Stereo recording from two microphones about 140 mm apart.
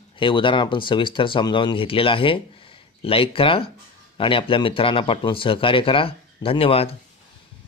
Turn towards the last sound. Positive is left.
turn(degrees=40)  # may be behind; listen again after turning